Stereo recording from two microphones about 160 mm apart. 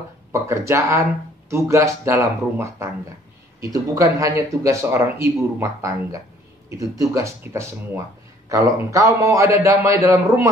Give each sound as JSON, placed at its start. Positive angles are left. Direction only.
{"t": 0.3, "sound": "speech", "side_deg": -20}